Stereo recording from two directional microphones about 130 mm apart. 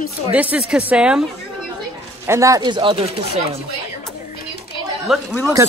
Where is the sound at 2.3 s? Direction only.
25° right (ahead or behind).